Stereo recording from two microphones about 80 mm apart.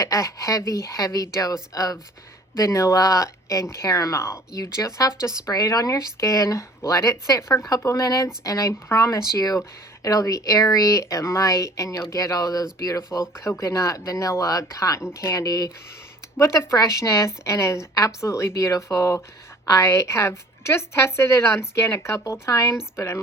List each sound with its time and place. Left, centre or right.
0.0 s a woman's voice: left
13.2 s a woman's voice: left
15.4 s speech: left
17.0 s a woman's voice: left